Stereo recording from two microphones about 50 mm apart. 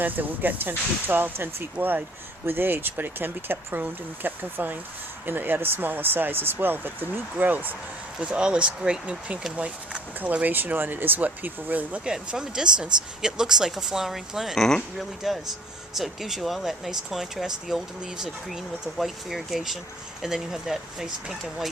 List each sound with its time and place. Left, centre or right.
0.0 s speech: right
8.2 s speech: centre; by 11.9 s right
12.0 s speech: centre